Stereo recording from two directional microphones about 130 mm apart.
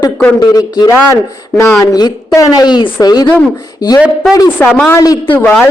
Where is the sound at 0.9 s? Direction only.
20° left (ahead or behind).